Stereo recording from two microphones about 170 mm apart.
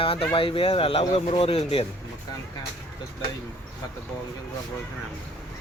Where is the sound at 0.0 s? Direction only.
30° left (ahead or behind).